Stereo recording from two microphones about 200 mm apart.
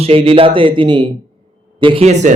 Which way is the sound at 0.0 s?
30° right (ahead or behind).